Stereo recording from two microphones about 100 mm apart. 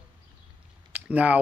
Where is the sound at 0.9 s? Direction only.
15° right (ahead or behind).